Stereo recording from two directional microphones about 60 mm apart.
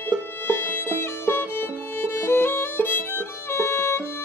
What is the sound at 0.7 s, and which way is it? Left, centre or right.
Music, left.